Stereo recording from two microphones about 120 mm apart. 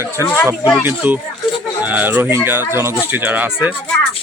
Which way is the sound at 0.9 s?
15° right (ahead or behind).